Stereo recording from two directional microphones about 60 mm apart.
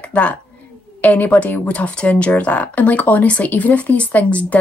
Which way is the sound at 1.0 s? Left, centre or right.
Left.